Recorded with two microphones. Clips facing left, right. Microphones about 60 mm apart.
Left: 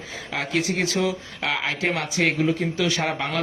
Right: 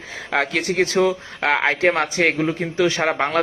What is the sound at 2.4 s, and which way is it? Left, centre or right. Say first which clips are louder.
Speech: right 3 dB; right.